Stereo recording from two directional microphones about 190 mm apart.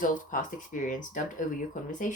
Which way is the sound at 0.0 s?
45° left (ahead or behind).